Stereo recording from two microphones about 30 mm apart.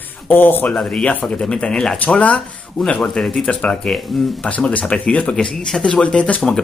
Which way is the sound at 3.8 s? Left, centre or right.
Centre.